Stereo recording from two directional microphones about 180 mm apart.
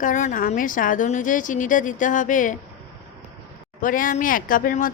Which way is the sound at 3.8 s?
50° left (ahead or behind).